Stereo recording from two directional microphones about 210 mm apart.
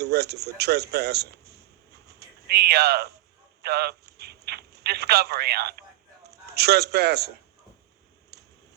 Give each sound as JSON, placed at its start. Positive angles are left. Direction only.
{"t": 0.0, "sound": "a man's voice", "side_deg": -50}